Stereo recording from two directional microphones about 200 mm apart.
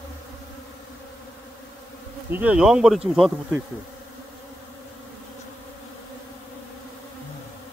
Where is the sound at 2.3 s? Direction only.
5° right (ahead or behind).